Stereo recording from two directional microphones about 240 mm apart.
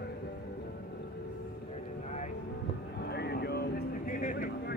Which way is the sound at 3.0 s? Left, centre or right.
Left.